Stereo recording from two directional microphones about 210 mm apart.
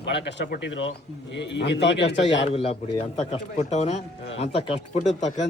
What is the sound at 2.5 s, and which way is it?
Speech, 30° left (ahead or behind).